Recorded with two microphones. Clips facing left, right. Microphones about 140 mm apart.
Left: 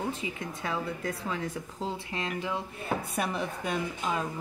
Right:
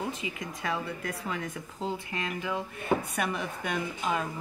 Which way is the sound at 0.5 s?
30° left (ahead or behind).